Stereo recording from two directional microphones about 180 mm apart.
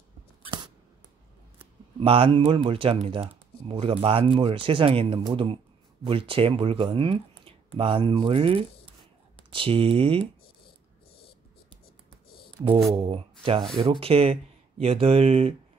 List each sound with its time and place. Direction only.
2.0 s speech: 30° right (ahead or behind)
12.9 s speech: 30° right (ahead or behind)